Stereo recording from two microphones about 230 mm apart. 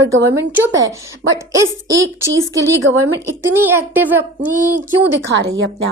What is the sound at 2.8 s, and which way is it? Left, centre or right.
Speech, right.